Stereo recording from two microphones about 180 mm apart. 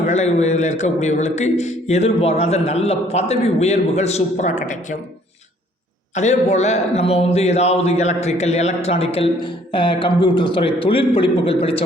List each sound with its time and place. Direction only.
0.0 s a man's voice: 40° left (ahead or behind)
6.1 s a man's voice: 40° left (ahead or behind)